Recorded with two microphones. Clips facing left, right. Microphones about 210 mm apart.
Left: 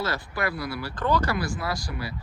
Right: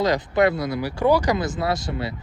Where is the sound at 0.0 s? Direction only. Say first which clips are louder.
Right 10 dB; 20° right (ahead or behind).